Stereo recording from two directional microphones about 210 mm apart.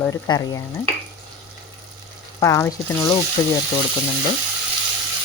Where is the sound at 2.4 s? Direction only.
15° left (ahead or behind).